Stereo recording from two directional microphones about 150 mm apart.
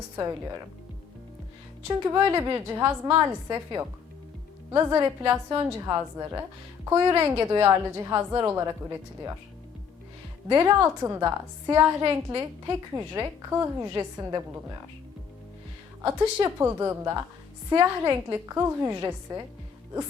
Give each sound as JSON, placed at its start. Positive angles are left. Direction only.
{"t": 1.9, "sound": "a woman's voice", "side_deg": -20}
{"t": 10.5, "sound": "a woman's voice", "side_deg": -20}
{"t": 16.0, "sound": "a woman's voice", "side_deg": -20}